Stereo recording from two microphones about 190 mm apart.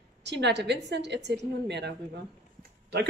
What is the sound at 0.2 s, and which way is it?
A woman's voice, 65° right (ahead or behind).